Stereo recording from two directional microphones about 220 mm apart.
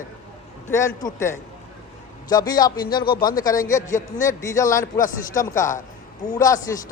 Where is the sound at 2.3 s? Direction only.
20° left (ahead or behind).